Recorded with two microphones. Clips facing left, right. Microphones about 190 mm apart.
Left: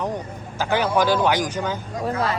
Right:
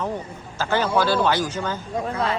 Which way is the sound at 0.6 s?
15° left (ahead or behind).